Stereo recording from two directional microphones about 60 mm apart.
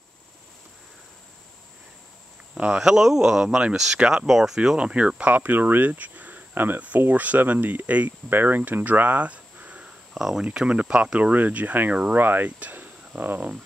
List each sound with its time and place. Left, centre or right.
2.5 s speech: centre
4.6 s speech: centre
10.1 s speech: centre; by 13.5 s right